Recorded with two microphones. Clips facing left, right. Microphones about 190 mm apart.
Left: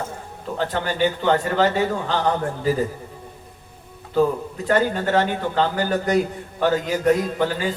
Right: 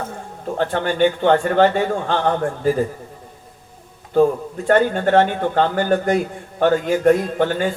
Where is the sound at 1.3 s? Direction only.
50° right (ahead or behind).